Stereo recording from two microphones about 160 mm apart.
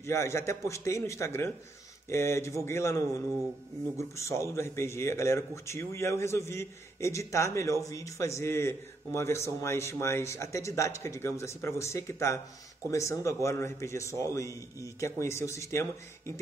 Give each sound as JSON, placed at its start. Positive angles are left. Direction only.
{"t": 0.0, "sound": "speech", "side_deg": 15}
{"t": 4.0, "sound": "speech", "side_deg": 15}